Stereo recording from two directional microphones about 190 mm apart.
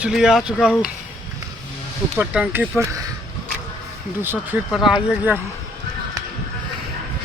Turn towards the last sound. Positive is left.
turn(degrees=-5)  # may be behind; listen again after turning